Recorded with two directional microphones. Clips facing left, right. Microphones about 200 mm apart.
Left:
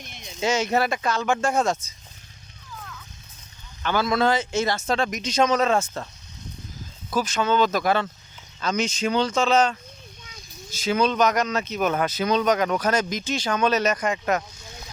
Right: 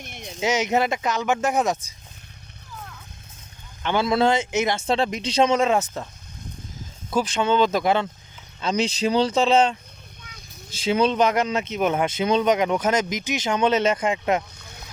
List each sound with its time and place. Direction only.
0.1 s a sound: 55° right (ahead or behind)
0.3 s speech: 15° right (ahead or behind)
3.8 s speech: 25° right (ahead or behind)
7.1 s speech: 25° right (ahead or behind)
8.6 s speech: 35° right (ahead or behind)
10.8 s speech: 30° right (ahead or behind)